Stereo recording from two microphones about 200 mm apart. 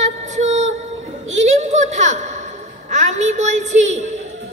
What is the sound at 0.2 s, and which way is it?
Female singing, 35° right (ahead or behind).